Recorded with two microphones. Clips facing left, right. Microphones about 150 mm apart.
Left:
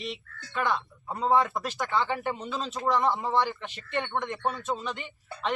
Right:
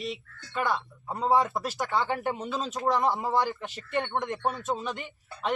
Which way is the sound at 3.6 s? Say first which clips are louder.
Right 2 dB; 40° right (ahead or behind).